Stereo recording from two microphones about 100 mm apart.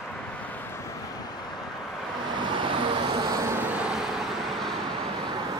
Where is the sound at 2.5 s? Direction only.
55° right (ahead or behind).